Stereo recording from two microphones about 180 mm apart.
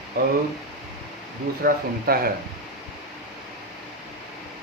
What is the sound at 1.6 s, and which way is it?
Speech, 55° right (ahead or behind).